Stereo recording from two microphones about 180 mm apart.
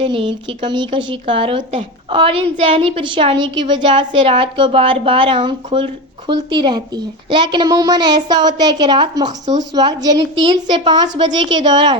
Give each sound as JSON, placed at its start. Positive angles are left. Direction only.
{"t": 0.0, "sound": "speech", "side_deg": -30}